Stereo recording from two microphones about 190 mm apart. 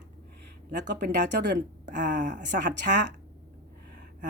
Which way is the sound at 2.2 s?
40° right (ahead or behind).